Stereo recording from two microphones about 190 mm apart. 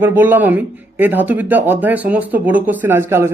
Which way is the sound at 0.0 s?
10° right (ahead or behind).